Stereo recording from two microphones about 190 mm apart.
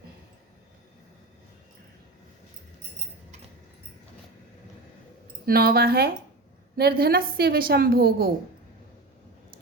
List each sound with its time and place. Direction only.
5.5 s a woman's voice: 50° right (ahead or behind)